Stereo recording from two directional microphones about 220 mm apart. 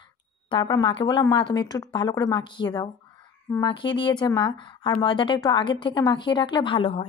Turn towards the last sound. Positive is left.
turn(degrees=25)  # may be behind; listen again after turning